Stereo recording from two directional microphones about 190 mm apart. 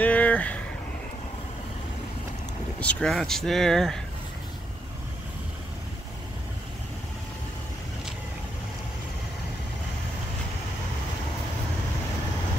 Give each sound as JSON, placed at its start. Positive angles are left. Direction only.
{"t": 0.0, "sound": "vehicle", "side_deg": 10}
{"t": 2.8, "sound": "speech", "side_deg": 5}